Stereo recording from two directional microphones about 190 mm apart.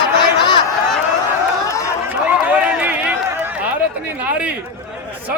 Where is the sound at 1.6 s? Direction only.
15° left (ahead or behind).